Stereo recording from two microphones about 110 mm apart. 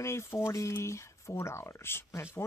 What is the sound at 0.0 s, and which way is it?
Speech, 25° left (ahead or behind).